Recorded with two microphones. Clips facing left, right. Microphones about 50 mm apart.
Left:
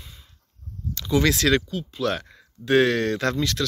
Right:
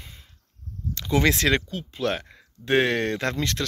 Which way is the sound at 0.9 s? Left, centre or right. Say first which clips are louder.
Left 1 dB; right.